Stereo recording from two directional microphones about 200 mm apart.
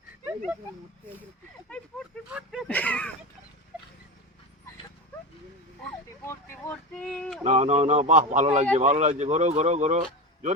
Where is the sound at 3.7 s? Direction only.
5° right (ahead or behind).